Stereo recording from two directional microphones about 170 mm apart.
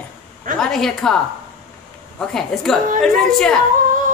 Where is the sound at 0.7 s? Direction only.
5° left (ahead or behind).